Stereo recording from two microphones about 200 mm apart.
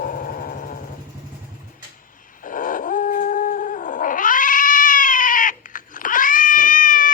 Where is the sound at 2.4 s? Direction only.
40° left (ahead or behind).